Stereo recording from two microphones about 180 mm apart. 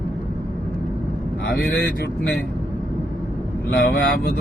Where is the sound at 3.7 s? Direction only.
70° left (ahead or behind).